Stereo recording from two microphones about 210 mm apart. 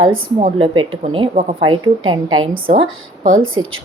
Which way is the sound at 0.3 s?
30° right (ahead or behind).